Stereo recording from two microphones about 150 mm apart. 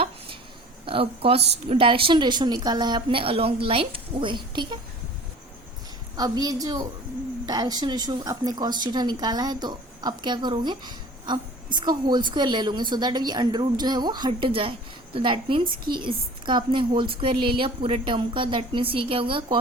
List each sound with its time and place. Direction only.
0.9 s a woman's voice: 40° right (ahead or behind)
6.1 s speech: 25° right (ahead or behind)